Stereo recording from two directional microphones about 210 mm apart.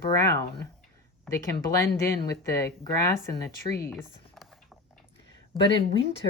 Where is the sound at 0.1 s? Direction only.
15° left (ahead or behind).